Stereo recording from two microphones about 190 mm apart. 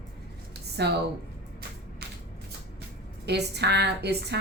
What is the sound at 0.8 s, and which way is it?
Speech, 60° right (ahead or behind).